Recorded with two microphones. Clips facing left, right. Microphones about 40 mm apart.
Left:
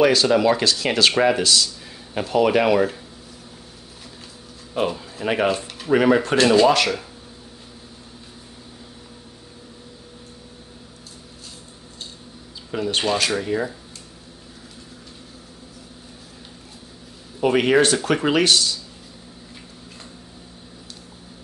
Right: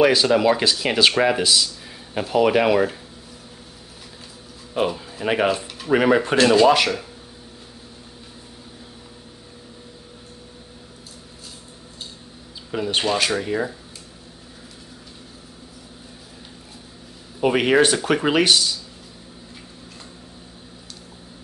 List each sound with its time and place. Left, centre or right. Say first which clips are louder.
0.0 s speech: even; centre
4.7 s speech: right 1 dB; centre
5.5 s a sound: even; centre
5.9 s speech: even; centre
6.3 s speech: right 1 dB; centre
12.7 s speech: even; centre
13.0 s speech: even; centre
17.4 s speech: even; centre